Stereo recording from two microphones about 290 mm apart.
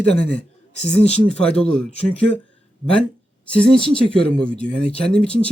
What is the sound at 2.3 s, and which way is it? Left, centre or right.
Speech, right.